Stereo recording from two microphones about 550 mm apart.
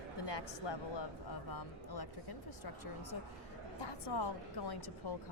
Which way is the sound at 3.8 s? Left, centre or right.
Left.